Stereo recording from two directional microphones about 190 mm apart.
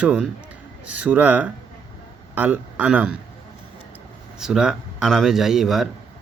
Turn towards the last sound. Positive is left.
turn(degrees=0)  # may be behind; listen again after turning